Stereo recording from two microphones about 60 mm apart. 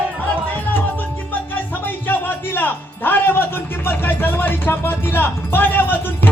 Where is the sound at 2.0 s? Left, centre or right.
Left.